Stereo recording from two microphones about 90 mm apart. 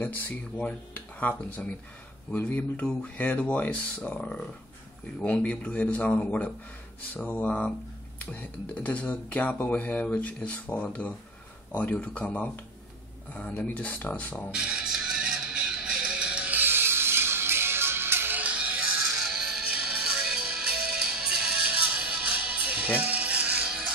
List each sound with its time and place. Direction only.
0.0 s speech: 15° left (ahead or behind)
14.5 s music: 10° right (ahead or behind)